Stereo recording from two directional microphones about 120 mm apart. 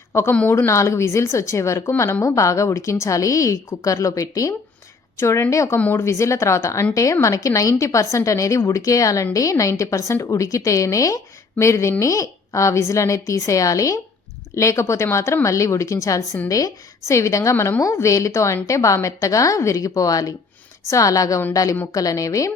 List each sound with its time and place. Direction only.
0.1 s a woman's voice: 20° left (ahead or behind)